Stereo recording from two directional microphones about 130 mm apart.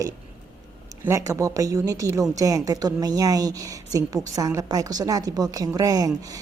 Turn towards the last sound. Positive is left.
turn(degrees=-30)  # may be behind; listen again after turning